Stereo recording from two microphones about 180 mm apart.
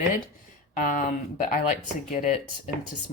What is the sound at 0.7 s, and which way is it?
Speech, 50° left (ahead or behind).